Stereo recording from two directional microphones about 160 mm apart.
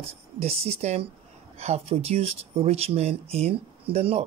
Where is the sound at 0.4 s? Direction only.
40° right (ahead or behind).